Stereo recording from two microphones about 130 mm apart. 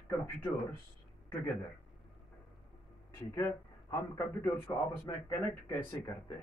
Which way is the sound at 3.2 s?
20° left (ahead or behind).